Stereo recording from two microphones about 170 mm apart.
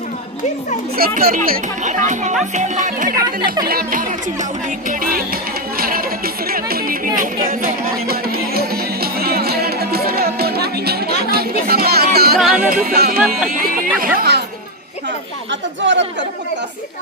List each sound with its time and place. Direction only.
0.9 s speech: 60° right (ahead or behind); by 3.1 s 45° right (ahead or behind)
3.4 s speech: 25° right (ahead or behind)
3.7 s music: 55° right (ahead or behind)
13.5 s speech: 55° right (ahead or behind)
14.2 s speech: 75° right (ahead or behind)
15.8 s speech: 90° right